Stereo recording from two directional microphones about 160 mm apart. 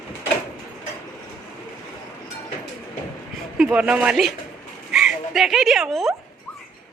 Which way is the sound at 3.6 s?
5° right (ahead or behind).